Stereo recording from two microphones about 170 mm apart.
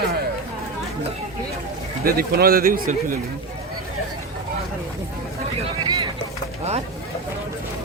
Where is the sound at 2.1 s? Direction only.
60° right (ahead or behind).